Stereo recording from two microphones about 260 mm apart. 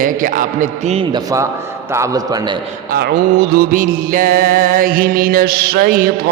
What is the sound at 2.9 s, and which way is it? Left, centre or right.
Mantra, right.